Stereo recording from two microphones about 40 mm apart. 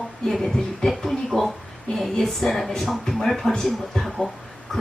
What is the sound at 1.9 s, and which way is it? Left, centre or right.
Speech, left.